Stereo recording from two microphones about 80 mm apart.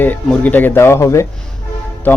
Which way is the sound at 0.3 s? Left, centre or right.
Left.